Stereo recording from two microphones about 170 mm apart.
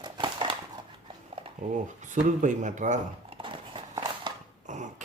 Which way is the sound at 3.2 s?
30° right (ahead or behind).